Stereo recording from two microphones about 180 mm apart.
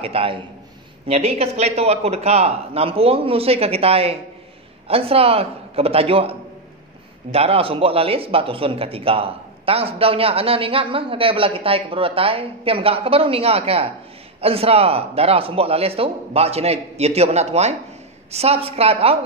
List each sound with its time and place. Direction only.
0.0 s speech: 30° right (ahead or behind)